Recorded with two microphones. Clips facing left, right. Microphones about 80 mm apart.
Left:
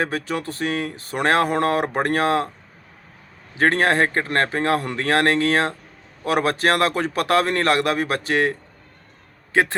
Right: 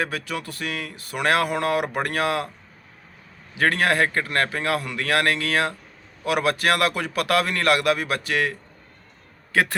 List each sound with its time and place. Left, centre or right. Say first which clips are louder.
0.0 s speech: left 4 dB; left
3.6 s speech: left 3 dB; left
9.5 s a man's voice: left 2 dB; left